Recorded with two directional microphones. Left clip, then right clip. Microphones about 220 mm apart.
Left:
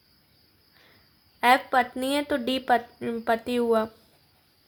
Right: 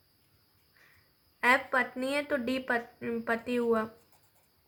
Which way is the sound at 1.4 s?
45° left (ahead or behind).